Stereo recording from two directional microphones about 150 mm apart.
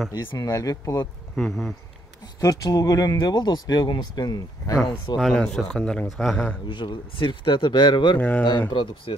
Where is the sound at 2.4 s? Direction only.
25° left (ahead or behind).